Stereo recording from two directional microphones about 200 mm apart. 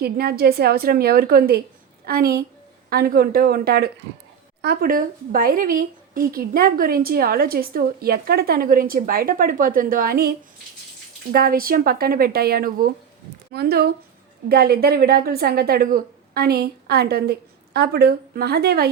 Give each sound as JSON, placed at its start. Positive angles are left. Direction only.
{"t": 0.0, "sound": "speech", "side_deg": -50}